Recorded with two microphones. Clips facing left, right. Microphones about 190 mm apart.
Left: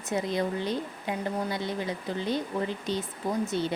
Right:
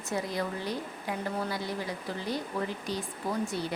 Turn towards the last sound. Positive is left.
turn(degrees=20)  # may be behind; listen again after turning